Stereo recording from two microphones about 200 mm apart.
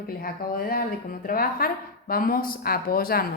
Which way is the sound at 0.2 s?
45° left (ahead or behind).